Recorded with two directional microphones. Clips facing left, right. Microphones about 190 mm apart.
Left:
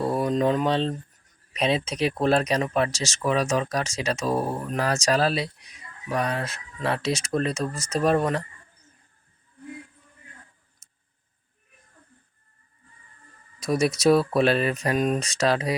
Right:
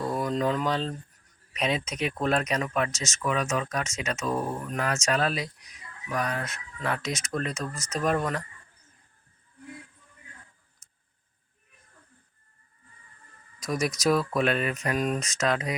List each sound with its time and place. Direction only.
0.0 s a sound: 30° left (ahead or behind)
1.5 s speech: 30° left (ahead or behind)
10.8 s tick: 30° left (ahead or behind)
13.6 s speech: 30° left (ahead or behind)